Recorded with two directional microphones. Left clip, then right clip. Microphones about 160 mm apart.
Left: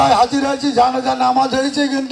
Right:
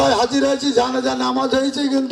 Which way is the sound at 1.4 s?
90° right.